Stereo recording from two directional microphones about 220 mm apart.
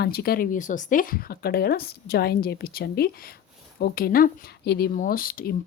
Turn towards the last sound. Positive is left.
turn(degrees=40)  # may be behind; listen again after turning